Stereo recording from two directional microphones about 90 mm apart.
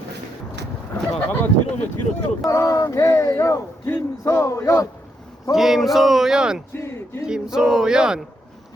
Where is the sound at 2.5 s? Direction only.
35° left (ahead or behind).